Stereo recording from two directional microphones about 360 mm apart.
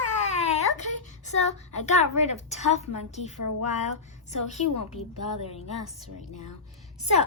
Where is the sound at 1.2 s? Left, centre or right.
Centre.